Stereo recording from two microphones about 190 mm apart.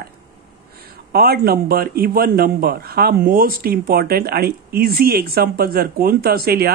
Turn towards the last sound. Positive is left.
turn(degrees=-55)  # may be behind; listen again after turning